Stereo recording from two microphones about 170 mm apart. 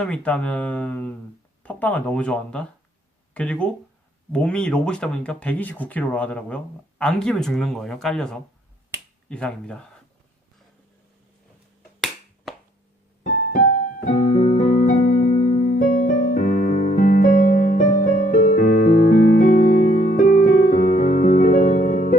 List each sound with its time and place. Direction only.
0.0 s speech: 5° left (ahead or behind)
11.9 s finger snapping: centre (ahead or behind)
13.5 s keyboard: 60° left (ahead or behind)
14.1 s keyboard: 45° left (ahead or behind)